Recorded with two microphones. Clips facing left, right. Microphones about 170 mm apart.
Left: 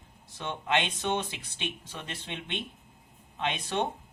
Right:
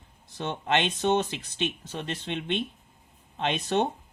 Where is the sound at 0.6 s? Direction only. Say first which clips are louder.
Right 4 dB; 40° right (ahead or behind).